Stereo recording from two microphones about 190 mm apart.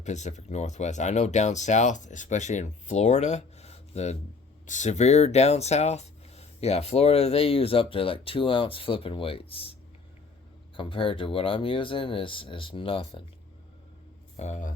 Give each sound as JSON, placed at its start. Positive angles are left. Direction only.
{"t": 0.0, "sound": "speech", "side_deg": 35}
{"t": 10.8, "sound": "speech", "side_deg": 25}
{"t": 14.3, "sound": "speech", "side_deg": 35}